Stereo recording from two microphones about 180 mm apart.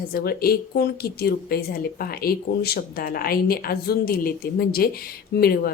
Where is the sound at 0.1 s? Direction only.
60° left (ahead or behind).